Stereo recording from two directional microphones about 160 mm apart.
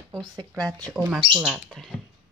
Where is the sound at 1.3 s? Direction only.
5° right (ahead or behind).